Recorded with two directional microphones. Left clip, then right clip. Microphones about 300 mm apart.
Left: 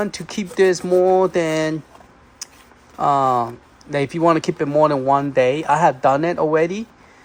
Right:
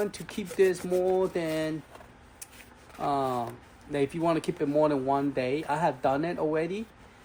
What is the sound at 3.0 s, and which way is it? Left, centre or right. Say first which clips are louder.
Speech: left 12 dB; left.